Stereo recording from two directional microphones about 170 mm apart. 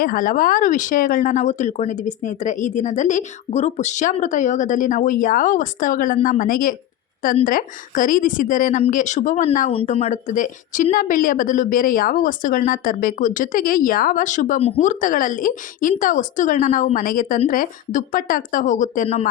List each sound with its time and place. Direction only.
0.0 s speech: 55° left (ahead or behind)